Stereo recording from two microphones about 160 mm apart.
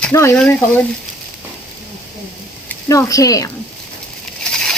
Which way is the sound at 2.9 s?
20° left (ahead or behind).